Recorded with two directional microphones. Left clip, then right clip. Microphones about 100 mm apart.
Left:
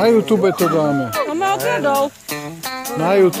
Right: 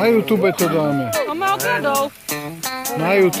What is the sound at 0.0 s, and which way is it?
Speech, 20° left (ahead or behind).